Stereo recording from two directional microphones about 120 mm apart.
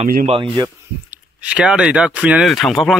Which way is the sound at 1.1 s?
10° right (ahead or behind).